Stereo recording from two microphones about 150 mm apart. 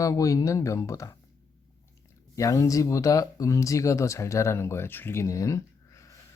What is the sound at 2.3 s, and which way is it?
Speech, 20° left (ahead or behind).